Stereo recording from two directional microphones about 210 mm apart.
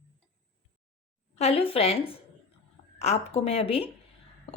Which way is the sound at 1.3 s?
30° left (ahead or behind).